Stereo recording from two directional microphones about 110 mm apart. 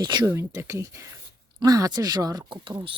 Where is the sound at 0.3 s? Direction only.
25° right (ahead or behind).